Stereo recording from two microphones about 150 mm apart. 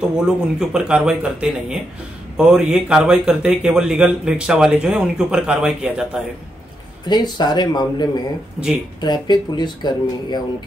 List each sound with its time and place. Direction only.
0.1 s speech: 5° right (ahead or behind)
7.1 s speech: 30° left (ahead or behind)